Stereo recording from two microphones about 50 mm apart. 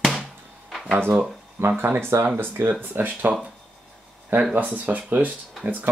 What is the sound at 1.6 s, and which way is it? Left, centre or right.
Speech, right.